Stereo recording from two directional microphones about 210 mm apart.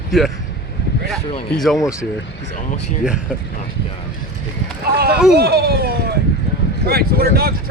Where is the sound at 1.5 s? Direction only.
Centre (ahead or behind).